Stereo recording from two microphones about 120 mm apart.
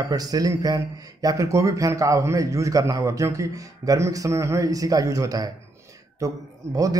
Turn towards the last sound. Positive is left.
turn(degrees=-30)  # may be behind; listen again after turning